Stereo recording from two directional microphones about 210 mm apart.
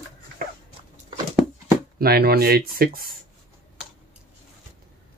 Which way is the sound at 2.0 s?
45° right (ahead or behind).